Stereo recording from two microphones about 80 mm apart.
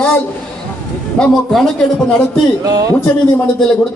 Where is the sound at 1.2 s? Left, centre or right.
Centre.